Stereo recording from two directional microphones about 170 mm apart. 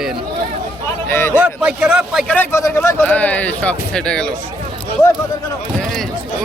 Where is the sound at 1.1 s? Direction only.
15° left (ahead or behind).